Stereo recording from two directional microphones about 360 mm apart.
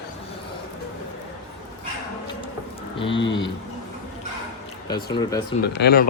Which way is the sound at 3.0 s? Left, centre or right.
Centre.